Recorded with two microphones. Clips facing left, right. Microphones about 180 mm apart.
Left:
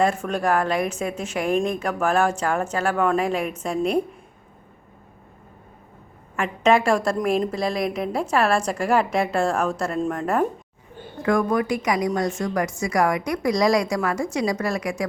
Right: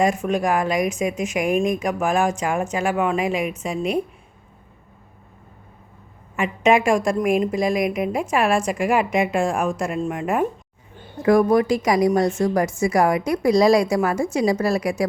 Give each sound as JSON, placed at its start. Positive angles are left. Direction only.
{"t": 0.0, "sound": "a woman's voice", "side_deg": -10}
{"t": 6.3, "sound": "a woman's voice", "side_deg": -10}
{"t": 11.2, "sound": "a sound", "side_deg": -20}
{"t": 11.7, "sound": "a woman's voice", "side_deg": -30}